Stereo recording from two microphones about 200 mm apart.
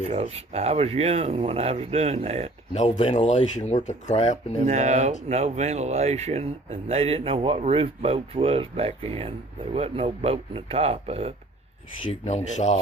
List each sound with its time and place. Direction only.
0.1 s speech: 30° right (ahead or behind)
2.7 s speech: 35° left (ahead or behind)
4.6 s speech: 35° right (ahead or behind)
12.2 s speech: 35° left (ahead or behind)